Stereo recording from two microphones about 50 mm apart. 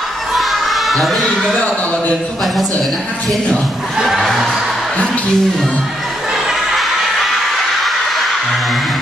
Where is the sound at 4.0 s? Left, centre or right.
Centre.